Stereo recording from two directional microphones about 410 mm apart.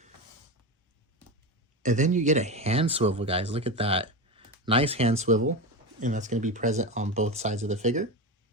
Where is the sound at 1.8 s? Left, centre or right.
Centre.